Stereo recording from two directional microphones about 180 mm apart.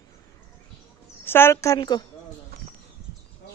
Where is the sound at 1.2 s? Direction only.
10° left (ahead or behind).